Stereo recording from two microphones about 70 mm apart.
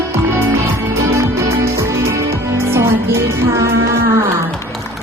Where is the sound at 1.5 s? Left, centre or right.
Right.